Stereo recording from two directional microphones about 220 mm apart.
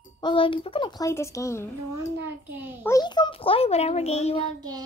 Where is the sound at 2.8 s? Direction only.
15° left (ahead or behind).